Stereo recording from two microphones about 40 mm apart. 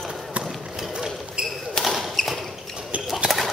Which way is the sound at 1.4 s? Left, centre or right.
Right.